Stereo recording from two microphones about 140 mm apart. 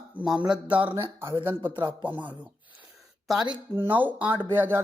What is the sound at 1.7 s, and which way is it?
Speech, 35° right (ahead or behind).